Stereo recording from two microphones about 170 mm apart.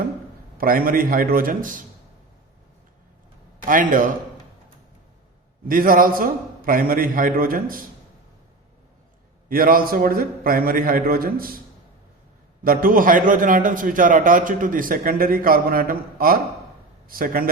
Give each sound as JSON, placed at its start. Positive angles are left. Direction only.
{"t": 0.6, "sound": "a man's voice", "side_deg": -55}
{"t": 3.7, "sound": "a man's voice", "side_deg": -50}
{"t": 5.6, "sound": "a man's voice", "side_deg": -55}
{"t": 9.5, "sound": "a man's voice", "side_deg": -55}
{"t": 12.6, "sound": "a man's voice", "side_deg": -55}